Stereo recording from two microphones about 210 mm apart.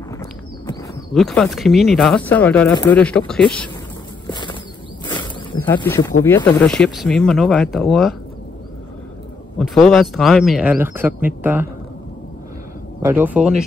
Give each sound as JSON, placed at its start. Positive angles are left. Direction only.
{"t": 1.1, "sound": "speech", "side_deg": 0}
{"t": 4.3, "sound": "bird flight", "side_deg": 20}
{"t": 5.0, "sound": "a sound", "side_deg": 20}
{"t": 5.8, "sound": "speech", "side_deg": 15}
{"t": 9.6, "sound": "a man's voice", "side_deg": 0}
{"t": 13.0, "sound": "a man's voice", "side_deg": -10}